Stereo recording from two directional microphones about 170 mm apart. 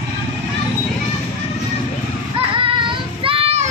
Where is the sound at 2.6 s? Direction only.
30° right (ahead or behind).